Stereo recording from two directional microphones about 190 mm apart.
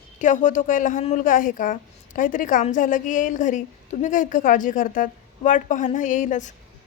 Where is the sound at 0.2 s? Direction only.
40° left (ahead or behind).